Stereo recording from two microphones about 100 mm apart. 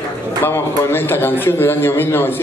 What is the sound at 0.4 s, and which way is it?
A man's voice, 20° left (ahead or behind).